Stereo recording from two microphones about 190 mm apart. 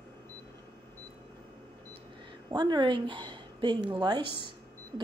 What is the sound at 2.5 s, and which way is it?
A woman's voice, 25° right (ahead or behind).